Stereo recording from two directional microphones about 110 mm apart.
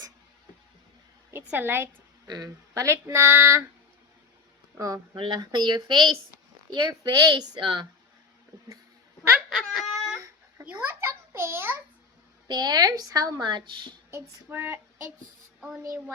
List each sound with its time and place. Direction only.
1.5 s speech: 20° right (ahead or behind)
2.2 s speech: 35° right (ahead or behind)
5.1 s speech: 50° right (ahead or behind)
5.4 s a woman's voice: 40° right (ahead or behind)
9.5 s a sound: 5° right (ahead or behind)
10.2 s a sound: 25° right (ahead or behind)
12.5 s a woman's voice: 40° right (ahead or behind)
14.1 s speech: 25° right (ahead or behind)